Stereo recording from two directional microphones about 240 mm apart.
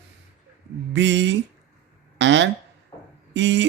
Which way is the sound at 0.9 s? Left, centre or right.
Right.